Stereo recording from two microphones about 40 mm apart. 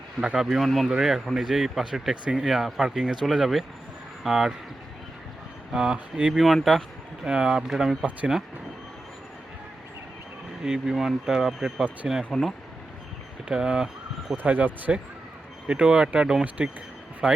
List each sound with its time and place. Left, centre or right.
0.4 s speech: centre
0.9 s speech: centre
5.7 s speech: centre
6.3 s speech: centre
7.3 s speech: centre
10.6 s speech: centre
12.3 s speech: centre
13.5 s speech: right
14.3 s speech: right
15.6 s speech: right
17.2 s speech: centre